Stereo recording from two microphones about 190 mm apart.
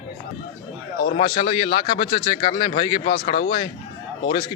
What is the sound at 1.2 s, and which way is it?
A man's voice, 25° left (ahead or behind).